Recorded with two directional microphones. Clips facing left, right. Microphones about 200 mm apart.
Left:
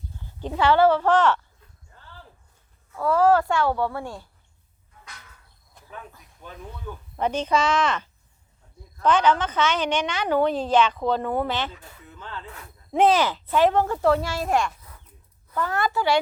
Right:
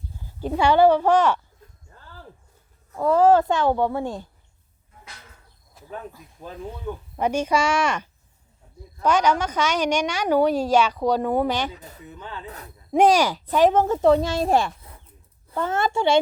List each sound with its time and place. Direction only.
0.3 s a woman's voice: 10° right (ahead or behind)
1.9 s a sound: 45° right (ahead or behind)
2.9 s speech: 20° right (ahead or behind)
5.8 s cricket: 5° right (ahead or behind)
6.4 s speech: 30° right (ahead or behind)
7.2 s a woman's voice: 10° right (ahead or behind)
11.7 s speech: 40° right (ahead or behind)
12.0 s a woman's voice: 15° right (ahead or behind)
12.5 s speech: 40° right (ahead or behind)
12.9 s speech: 15° right (ahead or behind)